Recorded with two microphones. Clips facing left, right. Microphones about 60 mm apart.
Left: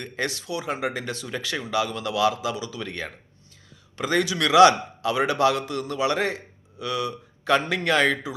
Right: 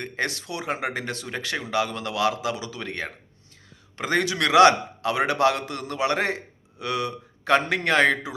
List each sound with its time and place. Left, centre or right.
0.0 s a man's voice: right
1.3 s a man's voice: right